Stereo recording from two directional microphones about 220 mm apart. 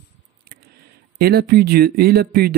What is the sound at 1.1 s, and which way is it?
Speech, 45° right (ahead or behind).